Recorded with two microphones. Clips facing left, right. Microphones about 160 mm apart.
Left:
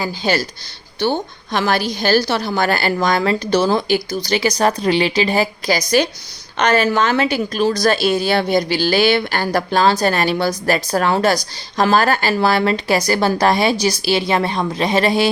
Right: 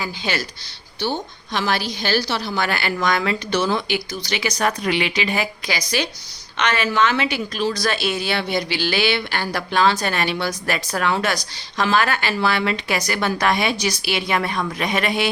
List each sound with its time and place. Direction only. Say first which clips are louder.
0.0 s a woman's voice: left 6 dB; 35° left (ahead or behind)
0.9 s a woman's voice: left 6 dB; 55° left (ahead or behind); by 15.3 s 35° left (ahead or behind)